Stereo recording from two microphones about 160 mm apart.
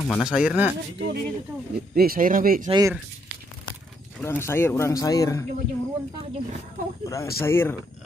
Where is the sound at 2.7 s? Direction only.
20° right (ahead or behind).